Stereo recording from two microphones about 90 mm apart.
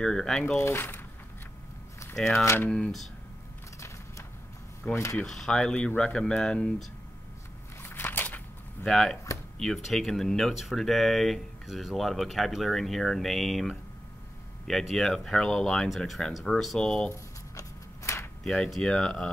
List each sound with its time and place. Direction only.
0.0 s speech: 5° left (ahead or behind)
0.6 s speech: 25° left (ahead or behind)
2.3 s speech: 25° left (ahead or behind)
2.7 s speech: 5° left (ahead or behind)
5.1 s speech: 5° left (ahead or behind)
7.8 s a sound: 25° left (ahead or behind)
8.8 s speech: 5° left (ahead or behind)
17.1 s shuffling cards: 30° left (ahead or behind)
18.4 s speech: 5° left (ahead or behind)